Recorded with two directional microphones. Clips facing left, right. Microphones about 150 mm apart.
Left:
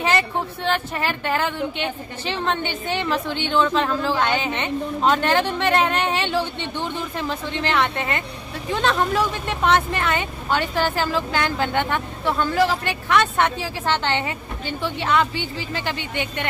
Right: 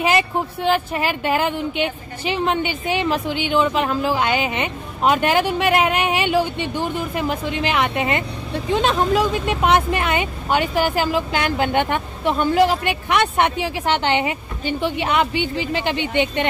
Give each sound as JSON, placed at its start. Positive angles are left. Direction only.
{"t": 0.7, "sound": "speech", "side_deg": -15}